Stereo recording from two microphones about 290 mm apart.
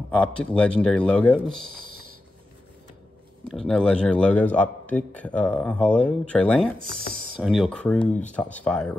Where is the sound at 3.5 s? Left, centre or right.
Centre.